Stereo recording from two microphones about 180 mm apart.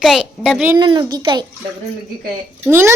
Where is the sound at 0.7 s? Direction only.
25° right (ahead or behind).